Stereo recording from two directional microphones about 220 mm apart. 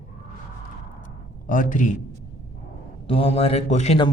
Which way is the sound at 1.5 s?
40° left (ahead or behind).